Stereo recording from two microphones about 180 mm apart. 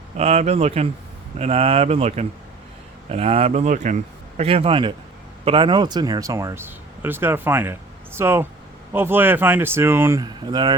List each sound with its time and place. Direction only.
0.2 s speech: 35° right (ahead or behind)
4.4 s speech: 30° right (ahead or behind)